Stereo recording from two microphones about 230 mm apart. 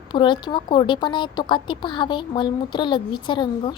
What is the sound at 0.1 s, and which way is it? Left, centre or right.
A woman's voice, centre.